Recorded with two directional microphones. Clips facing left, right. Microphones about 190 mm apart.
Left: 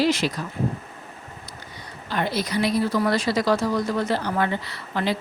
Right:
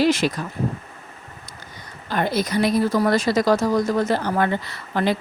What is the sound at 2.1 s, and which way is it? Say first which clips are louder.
A woman's voice: right 3 dB; 45° right (ahead or behind).